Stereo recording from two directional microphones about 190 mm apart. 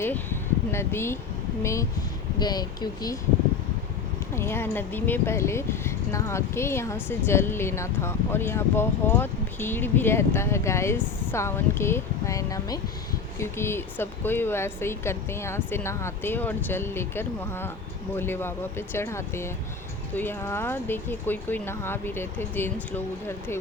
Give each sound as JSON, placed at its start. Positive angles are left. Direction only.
{"t": 0.0, "sound": "speech", "side_deg": 10}
{"t": 4.4, "sound": "speech", "side_deg": 10}